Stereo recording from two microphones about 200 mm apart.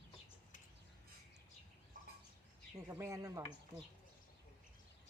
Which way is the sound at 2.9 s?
15° right (ahead or behind).